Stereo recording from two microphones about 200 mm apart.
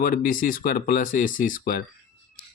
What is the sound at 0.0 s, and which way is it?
Speech, 45° left (ahead or behind).